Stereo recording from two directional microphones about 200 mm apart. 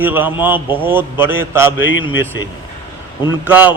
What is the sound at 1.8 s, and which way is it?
Speech, 70° left (ahead or behind).